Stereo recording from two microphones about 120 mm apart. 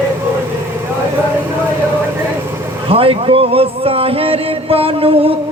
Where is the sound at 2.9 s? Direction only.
50° right (ahead or behind).